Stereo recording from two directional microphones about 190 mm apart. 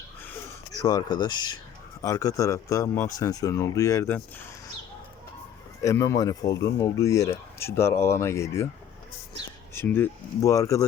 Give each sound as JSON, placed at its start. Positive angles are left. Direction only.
{"t": 0.7, "sound": "speech", "side_deg": 20}
{"t": 5.8, "sound": "speech", "side_deg": 15}